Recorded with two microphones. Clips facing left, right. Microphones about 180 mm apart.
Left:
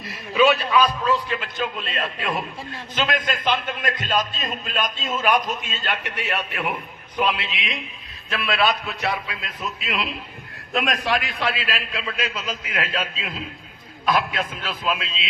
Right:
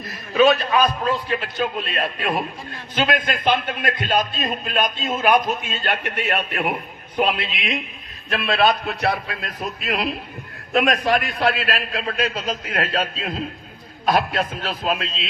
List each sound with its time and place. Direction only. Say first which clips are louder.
0.0 s a man's voice: right 2 dB; 50° right (ahead or behind)